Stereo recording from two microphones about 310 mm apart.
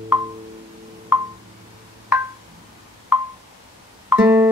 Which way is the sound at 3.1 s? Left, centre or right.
Centre.